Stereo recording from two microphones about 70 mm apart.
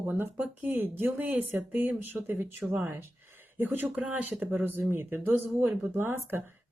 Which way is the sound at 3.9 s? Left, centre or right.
Centre.